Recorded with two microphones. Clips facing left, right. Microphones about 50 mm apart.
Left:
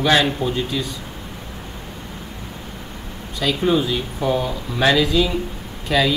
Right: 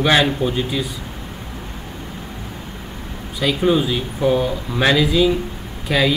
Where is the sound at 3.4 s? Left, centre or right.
Centre.